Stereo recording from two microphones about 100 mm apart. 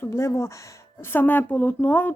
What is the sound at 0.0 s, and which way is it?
A woman's voice, 30° left (ahead or behind).